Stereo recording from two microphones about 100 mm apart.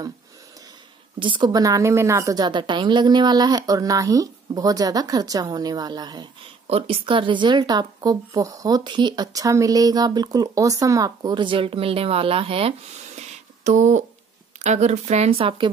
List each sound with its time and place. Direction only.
1.2 s a woman's voice: 55° right (ahead or behind)
1.5 s a woman's voice: 35° right (ahead or behind)
6.7 s speech: 65° right (ahead or behind)
14.9 s speech: 90° right; by 15.7 s 60° right (ahead or behind)